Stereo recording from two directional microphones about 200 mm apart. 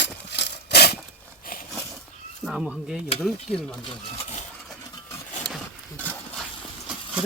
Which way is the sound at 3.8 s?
25° left (ahead or behind).